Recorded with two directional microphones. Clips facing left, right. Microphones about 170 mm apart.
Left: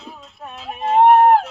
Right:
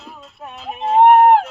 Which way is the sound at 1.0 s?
15° right (ahead or behind).